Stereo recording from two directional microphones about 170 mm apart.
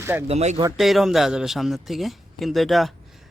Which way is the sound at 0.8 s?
Centre (ahead or behind).